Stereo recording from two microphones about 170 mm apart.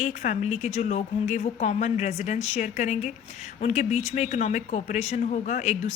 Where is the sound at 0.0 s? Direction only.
45° left (ahead or behind).